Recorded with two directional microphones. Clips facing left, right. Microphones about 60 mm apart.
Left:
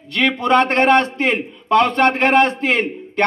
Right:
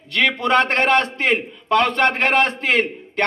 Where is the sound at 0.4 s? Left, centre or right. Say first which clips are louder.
Left 4 dB; left.